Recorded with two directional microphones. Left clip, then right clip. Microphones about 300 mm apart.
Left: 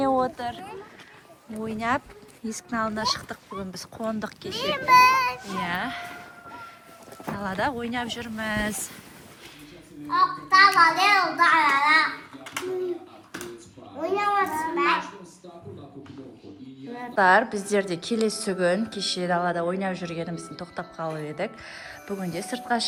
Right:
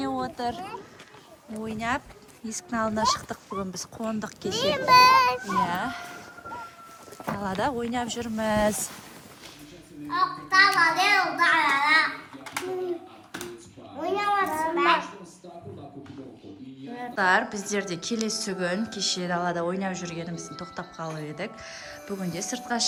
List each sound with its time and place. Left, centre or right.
0.0 s a sound: centre
0.4 s speech: centre
1.6 s a woman's voice: centre
4.5 s a child's voice: right
5.5 s speech: centre
7.3 s speech: centre
10.1 s a woman's voice: centre
13.3 s a sound: centre
14.0 s a woman's voice: centre
16.9 s a woman's voice: centre